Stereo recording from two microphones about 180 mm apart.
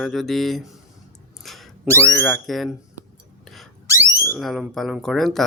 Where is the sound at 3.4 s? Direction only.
Centre (ahead or behind).